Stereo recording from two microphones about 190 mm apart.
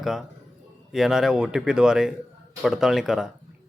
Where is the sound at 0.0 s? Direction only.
Centre (ahead or behind).